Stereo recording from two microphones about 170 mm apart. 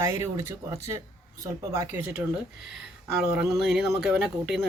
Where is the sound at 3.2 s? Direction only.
10° right (ahead or behind).